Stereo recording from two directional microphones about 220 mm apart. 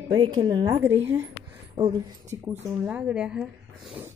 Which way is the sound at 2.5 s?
5° right (ahead or behind).